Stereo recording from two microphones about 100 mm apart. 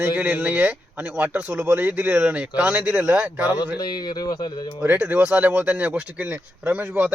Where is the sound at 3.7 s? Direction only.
45° left (ahead or behind).